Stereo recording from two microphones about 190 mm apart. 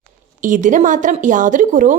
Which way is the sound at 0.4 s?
45° right (ahead or behind).